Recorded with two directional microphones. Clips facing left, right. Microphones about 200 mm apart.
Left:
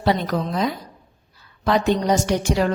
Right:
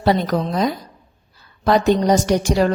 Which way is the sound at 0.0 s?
40° right (ahead or behind).